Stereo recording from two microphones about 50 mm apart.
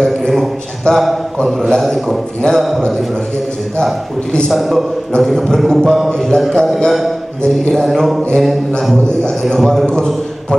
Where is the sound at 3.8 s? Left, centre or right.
Centre.